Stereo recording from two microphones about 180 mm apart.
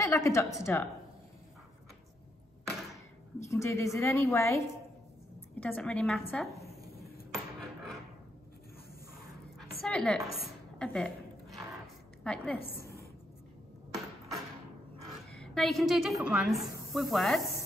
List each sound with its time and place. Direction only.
0.0 s a woman's voice: 15° left (ahead or behind)
3.4 s a woman's voice: 15° left (ahead or behind)
7.3 s a sound: centre (ahead or behind)
9.6 s a sound: 5° left (ahead or behind)
12.2 s a woman's voice: 5° left (ahead or behind)
15.3 s a woman's voice: 5° left (ahead or behind)